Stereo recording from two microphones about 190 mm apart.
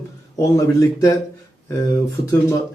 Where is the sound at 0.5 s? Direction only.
15° left (ahead or behind).